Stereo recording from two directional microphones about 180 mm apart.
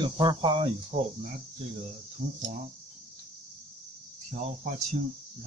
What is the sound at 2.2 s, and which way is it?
Speech, 25° right (ahead or behind).